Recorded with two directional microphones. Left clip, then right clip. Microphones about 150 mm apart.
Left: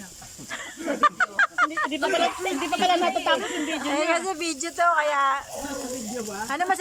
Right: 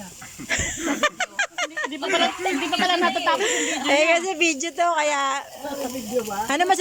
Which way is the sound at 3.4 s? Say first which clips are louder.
Right 5 dB; 20° right (ahead or behind).